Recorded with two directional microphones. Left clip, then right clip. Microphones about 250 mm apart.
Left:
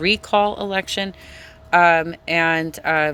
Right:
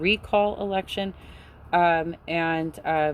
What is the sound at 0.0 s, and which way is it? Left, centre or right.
A woman's voice, centre.